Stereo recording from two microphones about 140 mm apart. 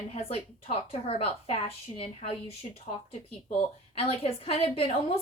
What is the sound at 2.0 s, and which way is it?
A woman's voice, 45° left (ahead or behind).